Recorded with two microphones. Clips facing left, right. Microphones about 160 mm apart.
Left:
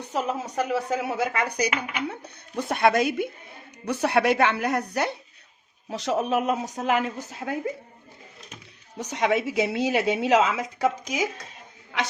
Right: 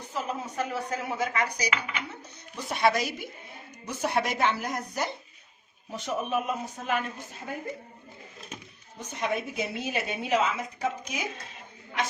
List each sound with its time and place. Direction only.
0.1 s speech: 85° left; by 3.2 s 55° left (ahead or behind)
3.8 s speech: 65° left (ahead or behind)
5.9 s a woman's voice: 90° left
9.0 s a woman's voice: 85° left